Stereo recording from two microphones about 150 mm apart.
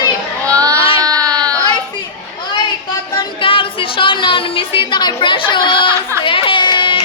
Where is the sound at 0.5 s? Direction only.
25° right (ahead or behind).